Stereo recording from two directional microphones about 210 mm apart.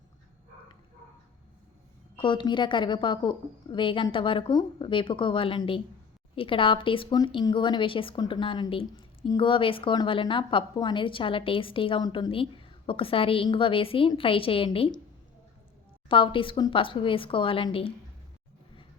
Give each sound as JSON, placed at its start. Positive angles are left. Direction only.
{"t": 2.1, "sound": "speech", "side_deg": 25}
{"t": 16.0, "sound": "speech", "side_deg": 25}